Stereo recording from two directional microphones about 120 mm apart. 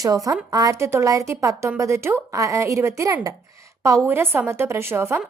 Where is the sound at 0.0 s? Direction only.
30° right (ahead or behind).